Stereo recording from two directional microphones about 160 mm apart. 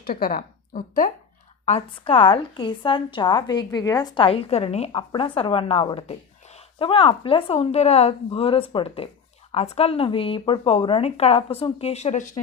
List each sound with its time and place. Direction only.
0.0 s a woman's voice: 65° left (ahead or behind)
1.6 s a woman's voice: 35° left (ahead or behind)